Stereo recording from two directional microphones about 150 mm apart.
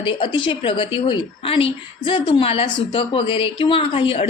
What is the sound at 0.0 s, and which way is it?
A woman's voice, 35° left (ahead or behind).